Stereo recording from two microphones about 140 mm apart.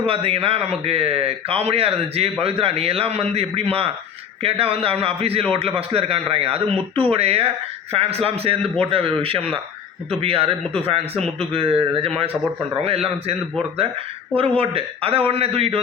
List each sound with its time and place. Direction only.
0.0 s a man's voice: 40° right (ahead or behind)
14.3 s a man's voice: 40° right (ahead or behind)